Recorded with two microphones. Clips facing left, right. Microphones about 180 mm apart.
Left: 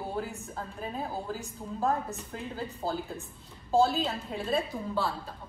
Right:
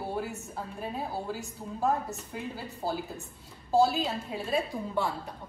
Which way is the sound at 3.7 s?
5° right (ahead or behind).